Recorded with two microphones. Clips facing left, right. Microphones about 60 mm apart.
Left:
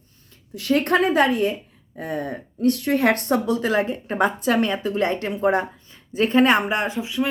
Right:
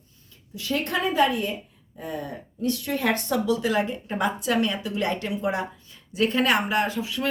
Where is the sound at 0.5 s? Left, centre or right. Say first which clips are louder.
Left 7 dB; left.